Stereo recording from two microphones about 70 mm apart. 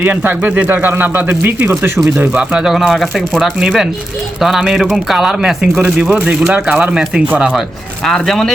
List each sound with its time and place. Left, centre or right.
0.0 s speech: right
2.3 s speech: centre
2.7 s speech: centre
8.0 s speech: centre